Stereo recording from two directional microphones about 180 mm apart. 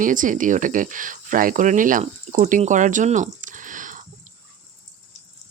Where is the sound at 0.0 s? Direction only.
45° right (ahead or behind).